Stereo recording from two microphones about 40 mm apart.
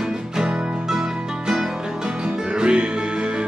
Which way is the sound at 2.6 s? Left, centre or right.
Right.